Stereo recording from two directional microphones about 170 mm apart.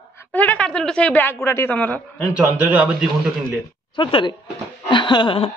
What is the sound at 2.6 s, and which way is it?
Speech, 10° right (ahead or behind).